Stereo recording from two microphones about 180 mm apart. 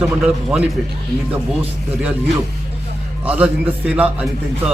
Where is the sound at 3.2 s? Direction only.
5° right (ahead or behind).